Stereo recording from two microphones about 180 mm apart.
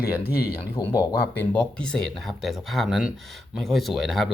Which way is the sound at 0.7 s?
25° left (ahead or behind).